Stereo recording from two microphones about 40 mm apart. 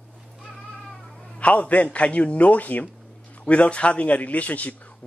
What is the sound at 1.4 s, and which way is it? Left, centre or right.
A man's voice, left.